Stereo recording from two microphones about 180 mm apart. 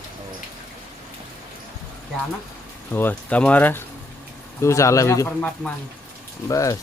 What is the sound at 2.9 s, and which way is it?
Speech, 10° left (ahead or behind).